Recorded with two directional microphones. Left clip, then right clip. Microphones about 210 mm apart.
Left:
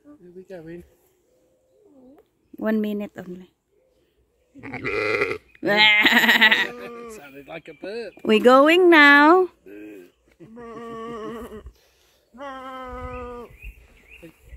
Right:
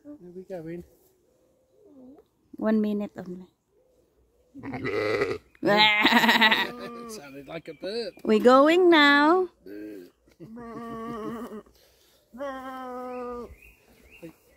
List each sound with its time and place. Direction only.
0.5 s speech: 50° right (ahead or behind)
2.5 s speech: 5° left (ahead or behind)
4.6 s sheep: 15° right (ahead or behind)
5.5 s speech: centre (ahead or behind)
7.2 s speech: 60° right (ahead or behind)
8.2 s speech: 15° left (ahead or behind)
9.7 s speech: 60° right (ahead or behind)
10.5 s a sound: 40° right (ahead or behind)
12.4 s a sound: 50° right (ahead or behind)
13.2 s livestock: 50° right (ahead or behind)